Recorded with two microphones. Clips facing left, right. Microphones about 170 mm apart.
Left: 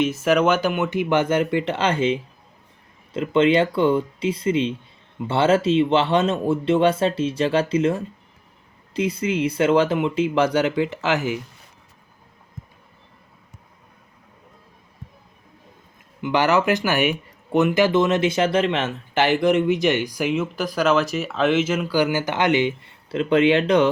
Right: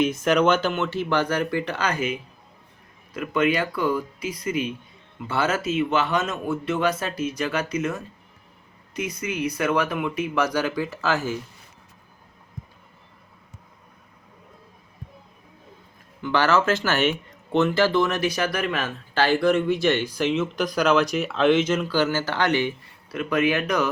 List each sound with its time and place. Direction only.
0.0 s speech: 5° left (ahead or behind)
16.2 s speech: 20° left (ahead or behind)